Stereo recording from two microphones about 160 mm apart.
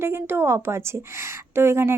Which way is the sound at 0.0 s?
15° right (ahead or behind).